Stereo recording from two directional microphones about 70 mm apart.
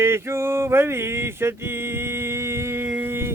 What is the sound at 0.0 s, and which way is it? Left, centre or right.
Male singing, right.